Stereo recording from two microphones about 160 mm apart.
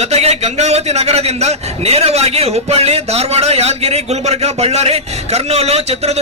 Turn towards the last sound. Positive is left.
turn(degrees=-40)  # may be behind; listen again after turning